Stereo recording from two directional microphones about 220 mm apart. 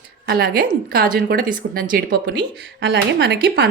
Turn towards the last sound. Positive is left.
turn(degrees=-50)  # may be behind; listen again after turning